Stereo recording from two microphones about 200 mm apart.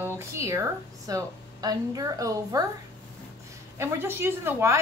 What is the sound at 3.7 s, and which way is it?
Speech, 10° right (ahead or behind).